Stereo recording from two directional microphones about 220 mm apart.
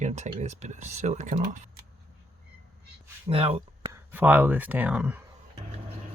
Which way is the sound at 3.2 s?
25° right (ahead or behind).